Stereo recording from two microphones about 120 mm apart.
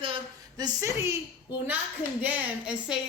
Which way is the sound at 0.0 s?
40° right (ahead or behind).